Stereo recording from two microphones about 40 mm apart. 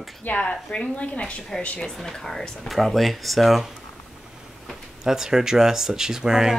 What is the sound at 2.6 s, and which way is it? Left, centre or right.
Speech, centre.